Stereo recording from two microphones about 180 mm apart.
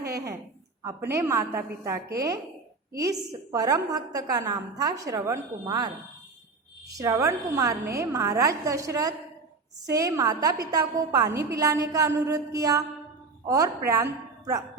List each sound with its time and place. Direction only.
0.8 s a woman's voice: 15° right (ahead or behind)